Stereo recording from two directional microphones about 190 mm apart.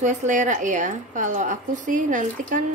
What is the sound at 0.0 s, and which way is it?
A woman's voice, 40° right (ahead or behind).